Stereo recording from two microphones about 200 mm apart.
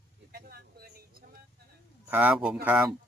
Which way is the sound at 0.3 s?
50° right (ahead or behind).